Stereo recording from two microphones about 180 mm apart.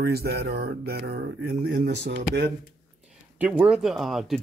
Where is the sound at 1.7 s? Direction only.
75° right (ahead or behind).